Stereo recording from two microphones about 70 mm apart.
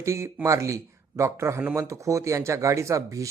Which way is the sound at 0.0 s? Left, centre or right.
Right.